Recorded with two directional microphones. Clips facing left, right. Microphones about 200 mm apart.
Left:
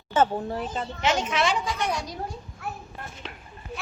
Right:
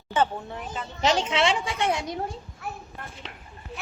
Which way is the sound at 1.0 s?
30° right (ahead or behind).